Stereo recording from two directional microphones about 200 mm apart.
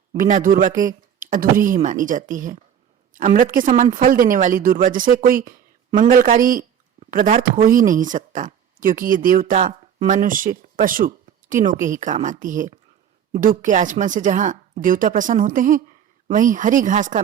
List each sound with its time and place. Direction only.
0.2 s a woman's voice: 45° right (ahead or behind)